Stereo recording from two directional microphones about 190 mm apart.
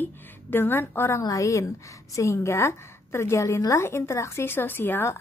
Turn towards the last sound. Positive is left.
turn(degrees=10)  # may be behind; listen again after turning